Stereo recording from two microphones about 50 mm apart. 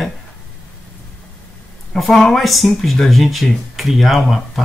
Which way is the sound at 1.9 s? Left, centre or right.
Centre.